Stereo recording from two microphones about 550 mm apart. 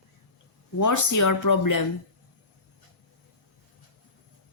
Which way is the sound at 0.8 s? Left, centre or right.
Left.